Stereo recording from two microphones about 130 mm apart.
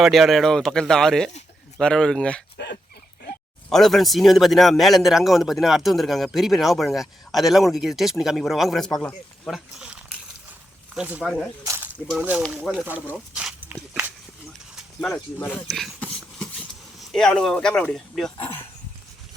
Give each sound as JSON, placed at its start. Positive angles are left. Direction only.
{"t": 0.0, "sound": "speech", "side_deg": 0}
{"t": 3.7, "sound": "speech", "side_deg": 0}
{"t": 9.0, "sound": "speech", "side_deg": 10}
{"t": 9.5, "sound": "a sound", "side_deg": -5}
{"t": 10.9, "sound": "speech", "side_deg": -10}
{"t": 11.6, "sound": "snake", "side_deg": -25}
{"t": 12.1, "sound": "speech", "side_deg": -10}
{"t": 14.8, "sound": "a sound", "side_deg": 5}
{"t": 15.4, "sound": "speech", "side_deg": 0}
{"t": 16.0, "sound": "a sound", "side_deg": 10}
{"t": 17.0, "sound": "speech", "side_deg": 0}